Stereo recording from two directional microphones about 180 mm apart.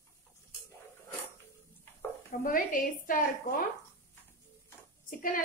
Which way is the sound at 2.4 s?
50° left (ahead or behind).